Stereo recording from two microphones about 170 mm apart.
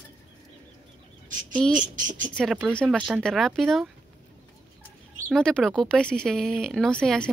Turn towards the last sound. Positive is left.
turn(degrees=5)  # may be behind; listen again after turning